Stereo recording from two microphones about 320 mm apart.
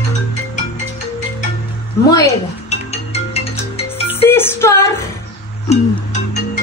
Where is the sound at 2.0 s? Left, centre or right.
Centre.